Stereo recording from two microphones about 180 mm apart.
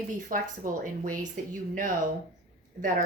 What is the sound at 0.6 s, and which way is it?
Speech, 45° right (ahead or behind).